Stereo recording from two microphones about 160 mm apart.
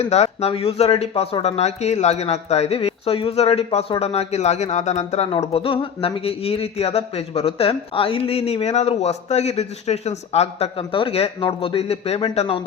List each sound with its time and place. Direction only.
0.0 s a man's voice: 40° left (ahead or behind)